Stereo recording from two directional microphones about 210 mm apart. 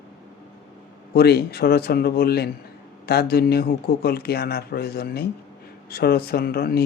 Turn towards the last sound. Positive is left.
turn(degrees=45)  # may be behind; listen again after turning